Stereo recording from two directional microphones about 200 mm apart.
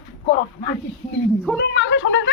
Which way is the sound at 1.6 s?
65° left (ahead or behind).